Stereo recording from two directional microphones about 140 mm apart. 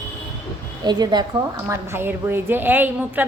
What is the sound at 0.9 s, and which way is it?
Speech, 30° right (ahead or behind).